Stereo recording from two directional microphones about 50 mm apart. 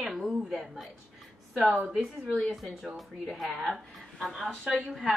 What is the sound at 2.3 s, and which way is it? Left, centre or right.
Speech, centre.